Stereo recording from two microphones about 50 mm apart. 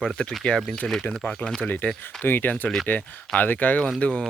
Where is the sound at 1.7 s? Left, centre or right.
Left.